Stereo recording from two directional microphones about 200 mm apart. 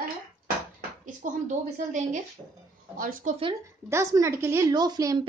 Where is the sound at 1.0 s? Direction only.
40° right (ahead or behind).